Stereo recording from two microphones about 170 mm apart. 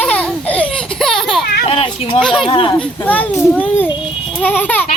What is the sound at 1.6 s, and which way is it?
A child's voice, 35° left (ahead or behind).